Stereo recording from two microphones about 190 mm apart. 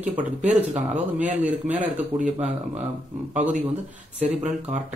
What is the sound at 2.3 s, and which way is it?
Speech, 35° right (ahead or behind).